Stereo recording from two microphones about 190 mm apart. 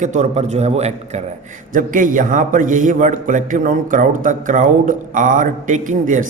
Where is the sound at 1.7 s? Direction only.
45° right (ahead or behind).